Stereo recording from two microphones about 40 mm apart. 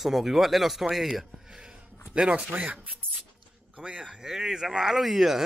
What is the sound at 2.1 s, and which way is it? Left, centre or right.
Speech, right.